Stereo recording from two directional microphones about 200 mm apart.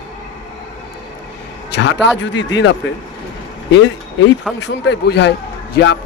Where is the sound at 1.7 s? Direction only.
65° left (ahead or behind).